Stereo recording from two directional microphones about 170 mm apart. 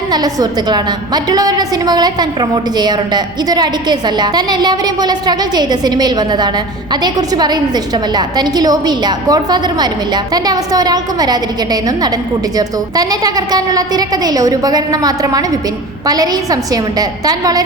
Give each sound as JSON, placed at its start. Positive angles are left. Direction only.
{"t": 0.1, "sound": "a woman's voice", "side_deg": -25}